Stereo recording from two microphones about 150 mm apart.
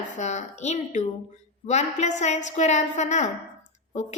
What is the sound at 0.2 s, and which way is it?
A woman's voice, 50° left (ahead or behind).